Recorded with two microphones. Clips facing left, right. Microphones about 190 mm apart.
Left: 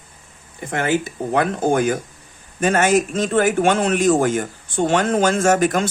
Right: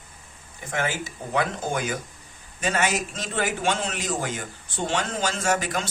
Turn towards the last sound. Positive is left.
turn(degrees=50)  # may be behind; listen again after turning